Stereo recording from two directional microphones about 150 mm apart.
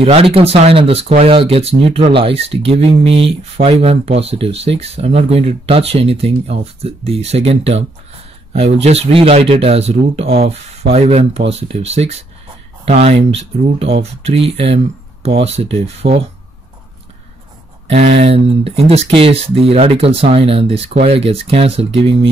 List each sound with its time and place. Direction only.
0.0 s speech: 40° right (ahead or behind)
17.8 s speech: 45° right (ahead or behind)